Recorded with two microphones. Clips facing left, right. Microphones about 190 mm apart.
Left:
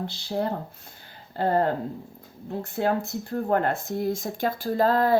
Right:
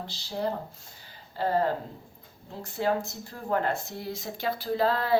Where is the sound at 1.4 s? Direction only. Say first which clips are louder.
Left 3 dB; 55° left (ahead or behind).